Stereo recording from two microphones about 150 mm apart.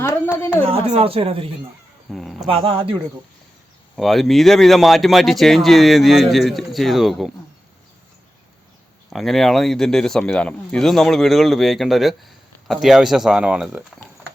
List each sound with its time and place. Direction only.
0.6 s speech: 40° right (ahead or behind)
2.0 s speech: centre (ahead or behind)
2.5 s speech: 40° right (ahead or behind)
3.9 s speech: centre (ahead or behind)
9.0 s speech: centre (ahead or behind)